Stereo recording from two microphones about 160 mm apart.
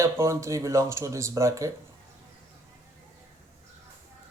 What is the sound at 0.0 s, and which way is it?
Speech, 20° right (ahead or behind).